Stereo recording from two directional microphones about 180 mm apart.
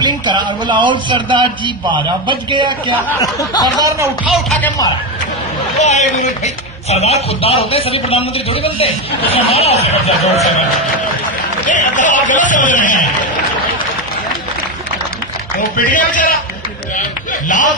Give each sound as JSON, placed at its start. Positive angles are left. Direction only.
{"t": 0.0, "sound": "a man's voice", "side_deg": -25}
{"t": 3.1, "sound": "speech", "side_deg": 20}
{"t": 4.3, "sound": "speech", "side_deg": 5}
{"t": 5.8, "sound": "speech", "side_deg": 40}
{"t": 11.6, "sound": "speech", "side_deg": 45}
{"t": 16.1, "sound": "speech", "side_deg": 45}
{"t": 17.5, "sound": "speech", "side_deg": 45}